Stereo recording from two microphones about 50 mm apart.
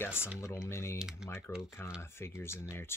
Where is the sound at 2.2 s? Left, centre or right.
Left.